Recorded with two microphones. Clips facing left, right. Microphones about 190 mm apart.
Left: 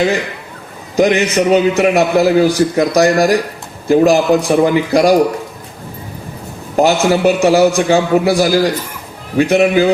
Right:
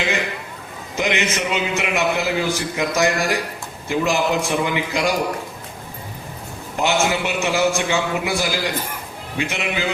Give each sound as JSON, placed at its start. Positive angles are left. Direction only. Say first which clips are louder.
{"t": 0.9, "sound": "a man's voice", "louder": "left 10 dB", "side_deg": 35}
{"t": 6.7, "sound": "a man's voice", "louder": "left 8 dB", "side_deg": 35}